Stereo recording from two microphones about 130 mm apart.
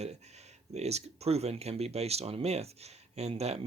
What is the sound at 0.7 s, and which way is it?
Speech, 55° right (ahead or behind).